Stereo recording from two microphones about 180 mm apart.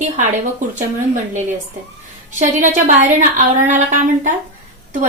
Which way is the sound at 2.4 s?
45° right (ahead or behind).